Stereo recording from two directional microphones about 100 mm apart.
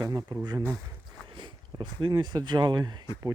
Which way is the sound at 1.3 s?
50° right (ahead or behind).